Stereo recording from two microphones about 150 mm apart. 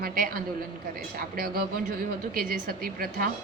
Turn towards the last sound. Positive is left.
turn(degrees=-70)  # may be behind; listen again after turning